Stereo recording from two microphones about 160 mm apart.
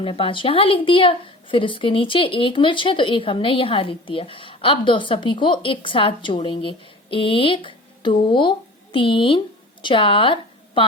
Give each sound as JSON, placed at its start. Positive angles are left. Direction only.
{"t": 0.0, "sound": "a woman's voice", "side_deg": 35}